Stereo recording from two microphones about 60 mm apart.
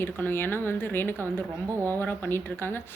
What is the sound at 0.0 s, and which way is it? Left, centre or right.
Speech, left.